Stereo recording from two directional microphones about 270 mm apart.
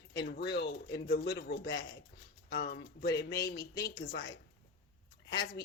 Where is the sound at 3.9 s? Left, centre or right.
Left.